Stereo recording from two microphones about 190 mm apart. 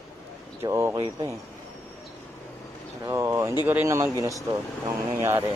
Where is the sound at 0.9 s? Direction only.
25° right (ahead or behind).